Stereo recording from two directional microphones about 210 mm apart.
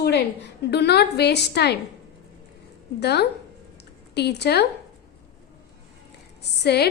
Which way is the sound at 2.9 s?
50° left (ahead or behind).